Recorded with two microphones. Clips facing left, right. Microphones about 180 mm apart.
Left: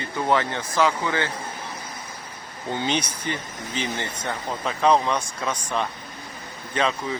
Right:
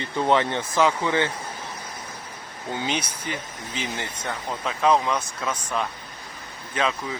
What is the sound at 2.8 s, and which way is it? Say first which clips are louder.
Speech: left 3 dB; 5° right (ahead or behind).